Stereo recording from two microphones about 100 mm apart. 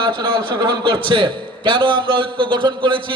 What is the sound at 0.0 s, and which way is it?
A man's voice, 55° right (ahead or behind).